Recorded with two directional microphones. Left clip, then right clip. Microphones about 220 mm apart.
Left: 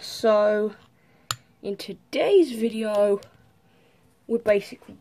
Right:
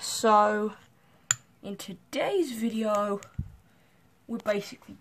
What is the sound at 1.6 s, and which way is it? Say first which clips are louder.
Speech: left 9 dB; 10° right (ahead or behind).